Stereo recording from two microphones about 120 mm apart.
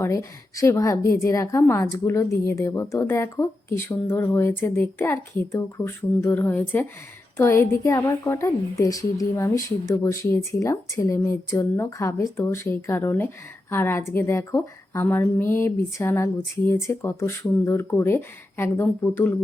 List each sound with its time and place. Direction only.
0.0 s a woman's voice: 25° left (ahead or behind)